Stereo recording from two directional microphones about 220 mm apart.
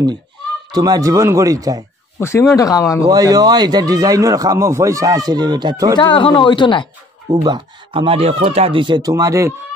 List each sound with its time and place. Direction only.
0.7 s a man's voice: 20° right (ahead or behind)
2.1 s speech: 10° left (ahead or behind)
3.1 s a man's voice: 15° right (ahead or behind)
5.9 s speech: 20° left (ahead or behind)
7.2 s speech: 15° right (ahead or behind)